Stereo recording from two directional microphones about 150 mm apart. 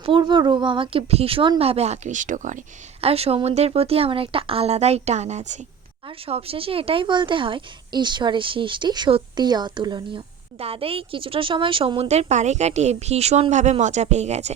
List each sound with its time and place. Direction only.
0.0 s speech: 30° right (ahead or behind); by 5.6 s 50° right (ahead or behind)
6.1 s a woman's voice: 40° right (ahead or behind)